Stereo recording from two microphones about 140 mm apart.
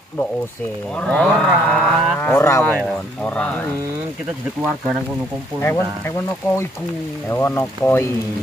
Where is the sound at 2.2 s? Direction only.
20° left (ahead or behind).